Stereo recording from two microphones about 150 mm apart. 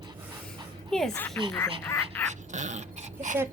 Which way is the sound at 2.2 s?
50° right (ahead or behind).